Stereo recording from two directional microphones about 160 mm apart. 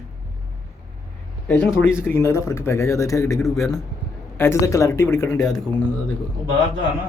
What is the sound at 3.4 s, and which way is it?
Speech, centre (ahead or behind).